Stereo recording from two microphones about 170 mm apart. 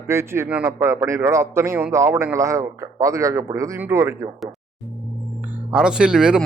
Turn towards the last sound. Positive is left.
turn(degrees=-5)  # may be behind; listen again after turning